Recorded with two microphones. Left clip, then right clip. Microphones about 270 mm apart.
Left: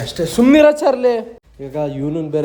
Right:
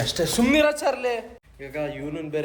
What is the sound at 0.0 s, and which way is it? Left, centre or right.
Speech, centre.